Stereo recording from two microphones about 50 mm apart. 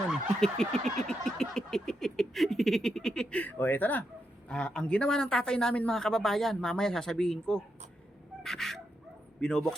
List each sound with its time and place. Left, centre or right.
0.3 s a sound: centre
3.6 s speech: left
4.4 s speech: centre